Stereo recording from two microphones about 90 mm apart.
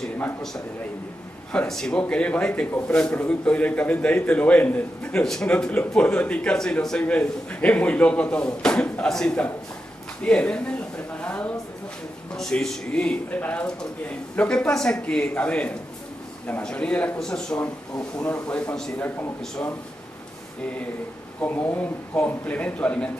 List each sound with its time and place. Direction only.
1.7 s speech: 5° left (ahead or behind)
21.4 s speech: 20° left (ahead or behind)